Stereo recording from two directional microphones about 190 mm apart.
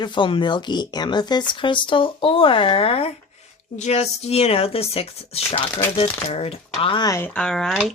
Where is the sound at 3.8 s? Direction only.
35° left (ahead or behind).